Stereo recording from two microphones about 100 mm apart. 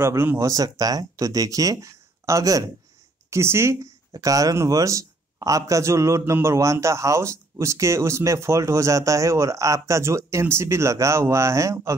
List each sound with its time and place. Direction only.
0.0 s speech: 25° right (ahead or behind)